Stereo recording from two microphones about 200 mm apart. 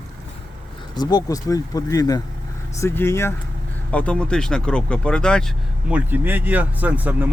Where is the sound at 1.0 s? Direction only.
20° left (ahead or behind); by 5.4 s 5° left (ahead or behind).